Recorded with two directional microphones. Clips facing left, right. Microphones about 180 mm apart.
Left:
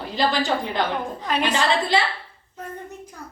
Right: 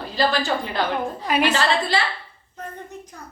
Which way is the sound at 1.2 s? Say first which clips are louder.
Right 3 dB; 10° right (ahead or behind).